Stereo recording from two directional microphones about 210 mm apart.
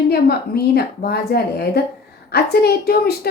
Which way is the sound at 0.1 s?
50° left (ahead or behind).